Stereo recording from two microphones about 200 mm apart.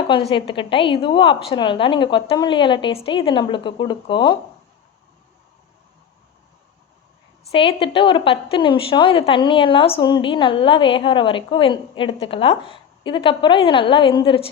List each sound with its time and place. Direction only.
0.1 s a woman's voice: 25° left (ahead or behind)
7.5 s a woman's voice: 25° left (ahead or behind)